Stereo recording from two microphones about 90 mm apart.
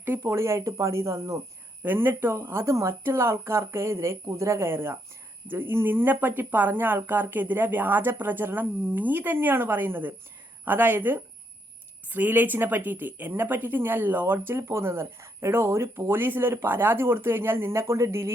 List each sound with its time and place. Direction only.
0.0 s speech: 30° right (ahead or behind)
1.8 s speech: 20° right (ahead or behind)